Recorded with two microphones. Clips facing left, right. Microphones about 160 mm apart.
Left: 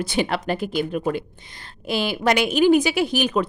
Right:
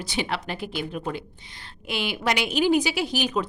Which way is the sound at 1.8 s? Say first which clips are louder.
Left 5 dB; 40° left (ahead or behind).